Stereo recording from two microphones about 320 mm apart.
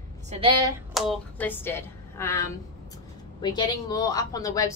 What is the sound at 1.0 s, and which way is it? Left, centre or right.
A woman's voice, centre.